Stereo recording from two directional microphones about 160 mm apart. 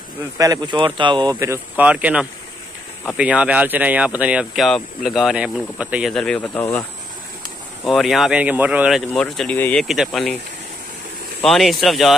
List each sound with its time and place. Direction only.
0.4 s speech: 25° right (ahead or behind); by 6.1 s 5° right (ahead or behind)
6.1 s speech: 5° left (ahead or behind)
7.8 s speech: centre (ahead or behind)
9.1 s speech: 5° left (ahead or behind)
11.4 s speech: centre (ahead or behind)